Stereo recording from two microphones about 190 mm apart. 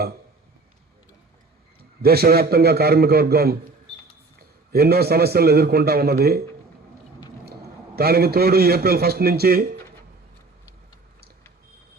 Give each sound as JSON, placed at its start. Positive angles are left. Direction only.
{"t": 2.0, "sound": "a man's voice", "side_deg": -55}
{"t": 4.7, "sound": "a man's voice", "side_deg": -55}
{"t": 7.4, "sound": "a man's voice", "side_deg": -55}